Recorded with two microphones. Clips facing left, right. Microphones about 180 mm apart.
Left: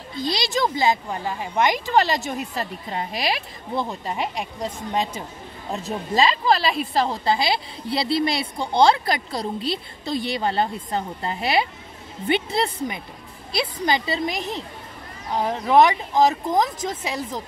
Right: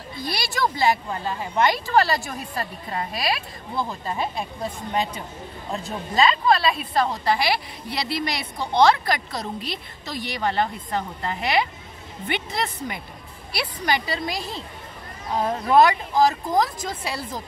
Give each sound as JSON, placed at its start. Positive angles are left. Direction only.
{"t": 0.2, "sound": "a woman's voice", "side_deg": 20}